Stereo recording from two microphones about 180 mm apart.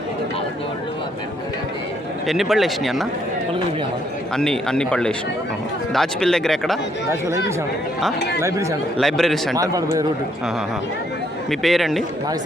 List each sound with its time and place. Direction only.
2.2 s speech: centre (ahead or behind)
4.4 s speech: 5° left (ahead or behind)
7.1 s speech: 15° right (ahead or behind)
9.0 s speech: centre (ahead or behind)
9.6 s speech: 20° right (ahead or behind)
11.6 s speech: centre (ahead or behind)